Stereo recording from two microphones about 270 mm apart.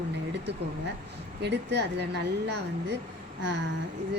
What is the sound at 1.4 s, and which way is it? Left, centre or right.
Speech, right.